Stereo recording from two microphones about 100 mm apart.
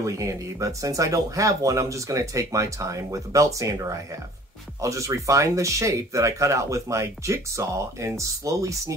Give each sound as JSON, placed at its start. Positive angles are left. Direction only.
{"t": 0.0, "sound": "speech", "side_deg": -30}